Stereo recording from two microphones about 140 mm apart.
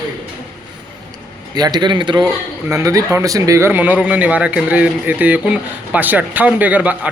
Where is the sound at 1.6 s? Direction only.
30° right (ahead or behind).